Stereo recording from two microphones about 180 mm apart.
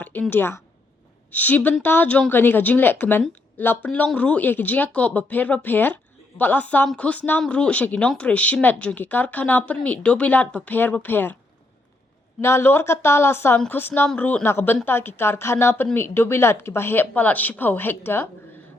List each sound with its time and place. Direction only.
0.0 s a woman's voice: 10° left (ahead or behind)
12.4 s speech: 15° left (ahead or behind)